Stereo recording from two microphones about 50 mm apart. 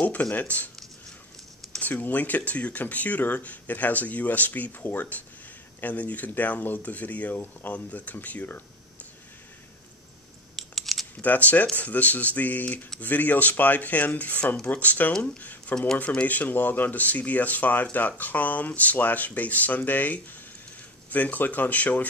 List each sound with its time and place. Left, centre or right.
0.0 s speech: left
1.8 s speech: left
10.5 s a sound: centre
11.1 s speech: left